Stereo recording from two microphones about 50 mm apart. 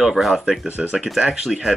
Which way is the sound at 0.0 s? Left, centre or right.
Centre.